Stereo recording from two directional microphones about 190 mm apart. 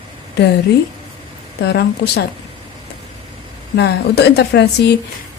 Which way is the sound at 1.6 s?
60° left (ahead or behind).